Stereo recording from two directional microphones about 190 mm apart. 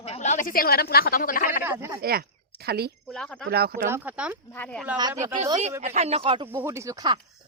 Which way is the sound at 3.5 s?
55° right (ahead or behind).